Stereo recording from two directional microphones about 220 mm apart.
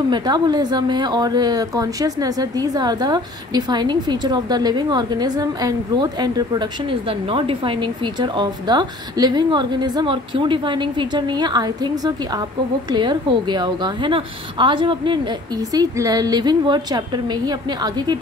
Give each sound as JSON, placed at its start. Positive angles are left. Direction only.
{"t": 0.1, "sound": "a woman's voice", "side_deg": -20}